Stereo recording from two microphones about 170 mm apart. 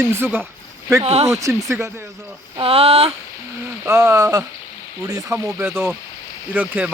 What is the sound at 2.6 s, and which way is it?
Speech, 35° right (ahead or behind).